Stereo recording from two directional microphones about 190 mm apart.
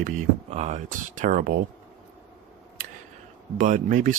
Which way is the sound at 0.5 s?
35° right (ahead or behind).